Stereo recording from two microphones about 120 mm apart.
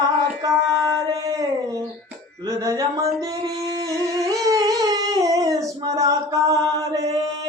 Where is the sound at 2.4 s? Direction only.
30° right (ahead or behind).